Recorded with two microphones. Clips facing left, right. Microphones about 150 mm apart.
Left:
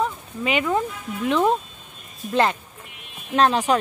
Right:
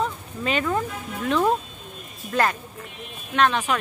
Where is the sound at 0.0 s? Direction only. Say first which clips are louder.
Left 2 dB; 10° left (ahead or behind).